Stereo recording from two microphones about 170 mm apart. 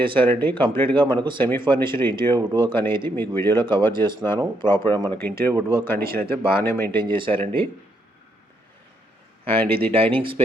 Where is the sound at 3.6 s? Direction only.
30° right (ahead or behind).